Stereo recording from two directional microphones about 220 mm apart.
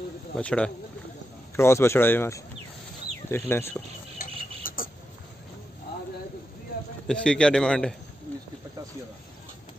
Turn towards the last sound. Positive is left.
turn(degrees=5)  # may be behind; listen again after turning